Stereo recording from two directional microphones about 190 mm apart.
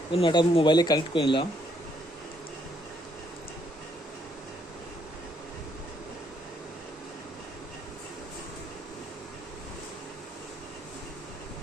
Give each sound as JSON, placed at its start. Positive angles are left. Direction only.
{"t": 0.1, "sound": "speech", "side_deg": 25}